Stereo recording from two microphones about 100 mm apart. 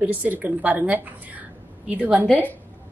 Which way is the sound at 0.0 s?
15° right (ahead or behind).